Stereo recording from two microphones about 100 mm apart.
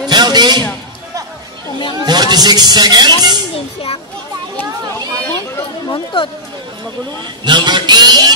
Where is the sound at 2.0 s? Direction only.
45° right (ahead or behind).